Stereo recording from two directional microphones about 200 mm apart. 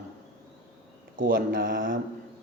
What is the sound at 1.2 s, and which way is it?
Speech, 45° right (ahead or behind).